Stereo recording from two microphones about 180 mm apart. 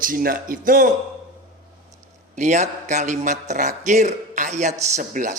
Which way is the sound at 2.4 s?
40° right (ahead or behind).